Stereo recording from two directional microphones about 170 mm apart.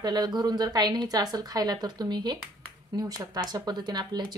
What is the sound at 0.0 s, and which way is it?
Speech, 25° right (ahead or behind).